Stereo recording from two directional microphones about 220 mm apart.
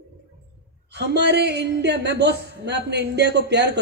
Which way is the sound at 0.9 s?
50° right (ahead or behind).